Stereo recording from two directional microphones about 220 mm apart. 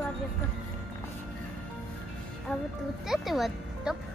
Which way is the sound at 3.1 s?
Centre (ahead or behind).